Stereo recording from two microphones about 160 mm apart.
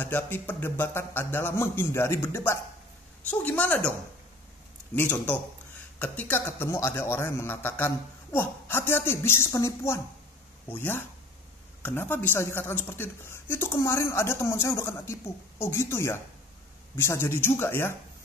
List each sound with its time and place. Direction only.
0.0 s a woman's voice: 10° left (ahead or behind)
4.9 s a woman's voice: 10° left (ahead or behind)